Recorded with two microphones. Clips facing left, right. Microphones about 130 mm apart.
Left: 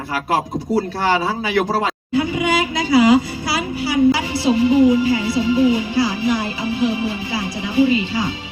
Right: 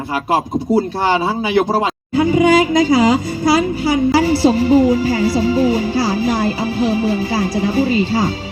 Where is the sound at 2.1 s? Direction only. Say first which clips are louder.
Right 7 dB; 40° right (ahead or behind).